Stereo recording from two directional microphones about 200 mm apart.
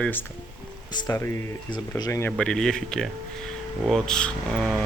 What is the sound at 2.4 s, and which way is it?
Speech, 5° left (ahead or behind).